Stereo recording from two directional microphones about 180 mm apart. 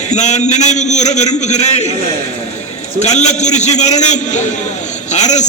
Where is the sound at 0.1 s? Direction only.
40° left (ahead or behind).